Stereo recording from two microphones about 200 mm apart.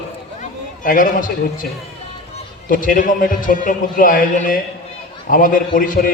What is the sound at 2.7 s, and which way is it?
A man's voice, 45° left (ahead or behind).